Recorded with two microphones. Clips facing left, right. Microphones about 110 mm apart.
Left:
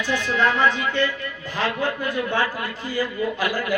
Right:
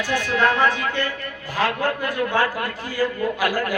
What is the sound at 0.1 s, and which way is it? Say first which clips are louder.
Speech: right 1 dB; 50° right (ahead or behind).